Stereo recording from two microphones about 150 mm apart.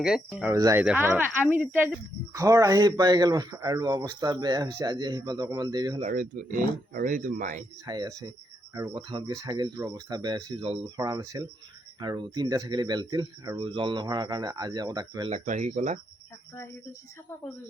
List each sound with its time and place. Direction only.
0.0 s speech: 5° right (ahead or behind)
0.5 s speech: 20° right (ahead or behind)
0.8 s speech: 10° right (ahead or behind)
6.1 s speech: 65° right (ahead or behind)
7.9 s speech: 25° right (ahead or behind)
9.0 s speech: 35° right (ahead or behind)
10.6 s speech: 40° right (ahead or behind)
10.9 s speech: 25° right (ahead or behind)
13.6 s speech: 35° right (ahead or behind)
15.3 s speech: 55° right (ahead or behind)